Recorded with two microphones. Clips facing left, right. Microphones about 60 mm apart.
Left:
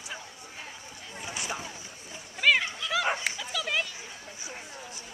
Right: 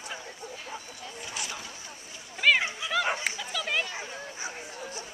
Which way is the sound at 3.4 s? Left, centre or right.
Centre.